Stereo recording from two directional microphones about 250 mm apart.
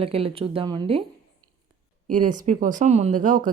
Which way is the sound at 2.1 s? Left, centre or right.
Right.